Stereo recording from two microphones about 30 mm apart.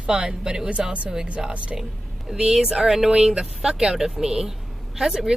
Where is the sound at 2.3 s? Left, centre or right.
Right.